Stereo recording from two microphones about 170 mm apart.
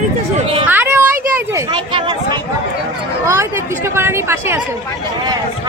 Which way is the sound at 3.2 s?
15° right (ahead or behind).